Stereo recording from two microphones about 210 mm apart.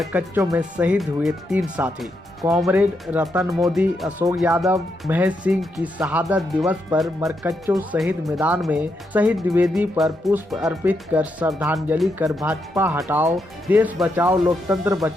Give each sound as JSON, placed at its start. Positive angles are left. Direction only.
{"t": 0.0, "sound": "speech", "side_deg": -5}
{"t": 7.2, "sound": "speech", "side_deg": -15}